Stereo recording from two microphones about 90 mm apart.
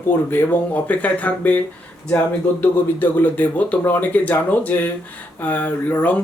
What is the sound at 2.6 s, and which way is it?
Speech, 20° left (ahead or behind).